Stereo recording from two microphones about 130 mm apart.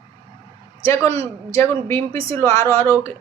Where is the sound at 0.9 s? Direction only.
20° left (ahead or behind).